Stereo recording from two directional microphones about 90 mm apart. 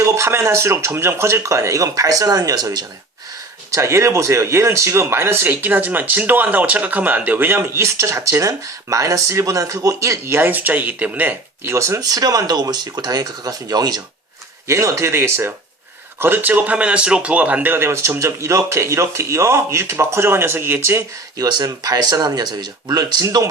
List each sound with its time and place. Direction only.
0.0 s speech: 30° right (ahead or behind)
3.7 s speech: 30° right (ahead or behind); by 14.0 s 45° right (ahead or behind)
14.7 s speech: 35° right (ahead or behind)
21.3 s speech: 45° right (ahead or behind)
23.2 s speech: 35° right (ahead or behind)